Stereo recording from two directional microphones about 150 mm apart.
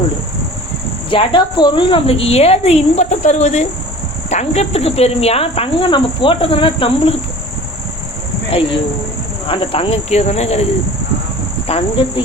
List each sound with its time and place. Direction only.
1.1 s speech: 35° left (ahead or behind)
8.4 s speech: 40° left (ahead or behind)
11.7 s speech: 40° left (ahead or behind)